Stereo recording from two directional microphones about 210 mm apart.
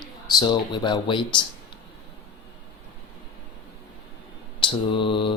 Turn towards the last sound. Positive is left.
turn(degrees=25)  # may be behind; listen again after turning